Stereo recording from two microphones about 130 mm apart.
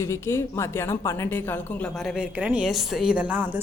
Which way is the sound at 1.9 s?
5° right (ahead or behind).